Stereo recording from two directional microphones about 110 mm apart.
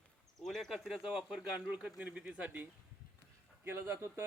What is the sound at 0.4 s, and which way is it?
Speech, centre (ahead or behind).